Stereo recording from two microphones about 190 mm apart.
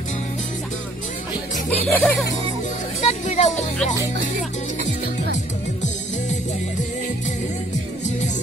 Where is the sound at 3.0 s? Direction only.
35° left (ahead or behind).